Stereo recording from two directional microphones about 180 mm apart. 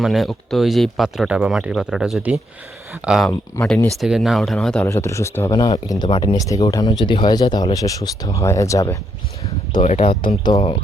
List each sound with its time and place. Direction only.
0.0 s speech: centre (ahead or behind)
3.5 s speech: 15° left (ahead or behind)
3.9 s speech: centre (ahead or behind)
4.9 s speech: 15° left (ahead or behind)
9.8 s speech: 40° left (ahead or behind)
10.4 s speech: 25° left (ahead or behind)